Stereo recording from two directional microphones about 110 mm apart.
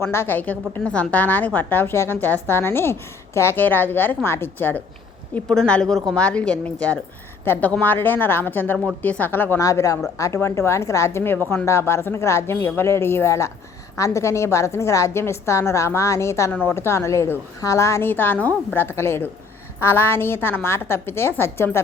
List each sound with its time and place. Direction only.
0.0 s a woman's voice: 20° left (ahead or behind)
5.3 s a woman's voice: 5° left (ahead or behind)
9.6 s a woman's voice: 30° left (ahead or behind)